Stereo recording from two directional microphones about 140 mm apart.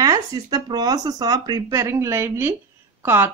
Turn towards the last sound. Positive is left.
turn(degrees=-15)  # may be behind; listen again after turning